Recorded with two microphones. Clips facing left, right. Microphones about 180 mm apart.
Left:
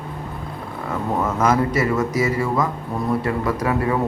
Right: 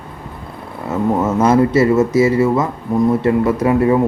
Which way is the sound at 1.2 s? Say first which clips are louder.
Right 6 dB; 25° right (ahead or behind).